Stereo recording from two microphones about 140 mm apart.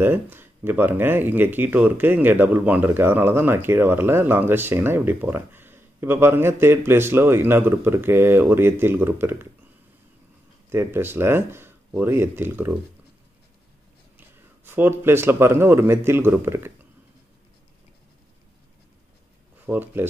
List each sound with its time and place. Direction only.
0.0 s speech: 15° right (ahead or behind)
10.7 s speech: 15° right (ahead or behind)
14.1 s a man's voice: 15° right (ahead or behind)
19.6 s speech: 10° right (ahead or behind)